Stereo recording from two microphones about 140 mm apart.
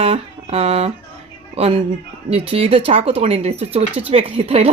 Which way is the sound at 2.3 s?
45° right (ahead or behind).